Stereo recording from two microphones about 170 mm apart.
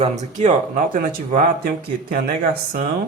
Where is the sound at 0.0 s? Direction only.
45° right (ahead or behind); by 2.9 s 60° right (ahead or behind).